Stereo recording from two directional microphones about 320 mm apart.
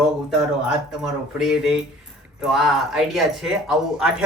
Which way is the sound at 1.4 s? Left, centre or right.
Centre.